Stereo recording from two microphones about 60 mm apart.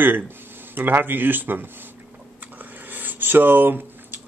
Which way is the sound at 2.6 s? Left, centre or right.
Right.